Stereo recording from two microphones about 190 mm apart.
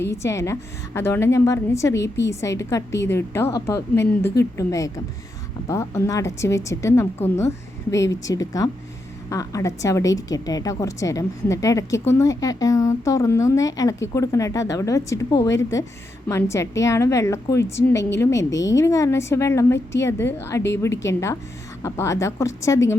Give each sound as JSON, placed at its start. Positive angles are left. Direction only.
{"t": 0.0, "sound": "a woman's voice", "side_deg": 15}